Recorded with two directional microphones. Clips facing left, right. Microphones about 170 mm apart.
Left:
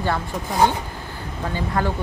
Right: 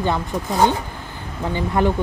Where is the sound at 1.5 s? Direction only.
20° right (ahead or behind).